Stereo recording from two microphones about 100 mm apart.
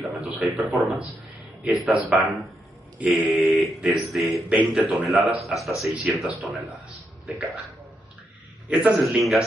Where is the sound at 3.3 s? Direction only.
5° right (ahead or behind).